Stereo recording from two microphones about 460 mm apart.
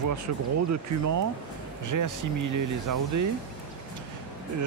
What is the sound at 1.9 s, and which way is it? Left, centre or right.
Speech, right.